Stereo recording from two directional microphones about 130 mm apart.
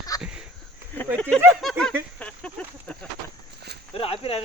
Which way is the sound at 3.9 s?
45° left (ahead or behind).